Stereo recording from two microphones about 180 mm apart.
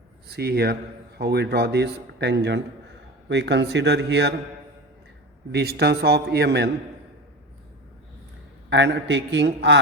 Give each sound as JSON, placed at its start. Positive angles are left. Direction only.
{"t": 0.3, "sound": "a man's voice", "side_deg": -60}
{"t": 5.5, "sound": "a man's voice", "side_deg": -65}
{"t": 8.7, "sound": "a man's voice", "side_deg": -75}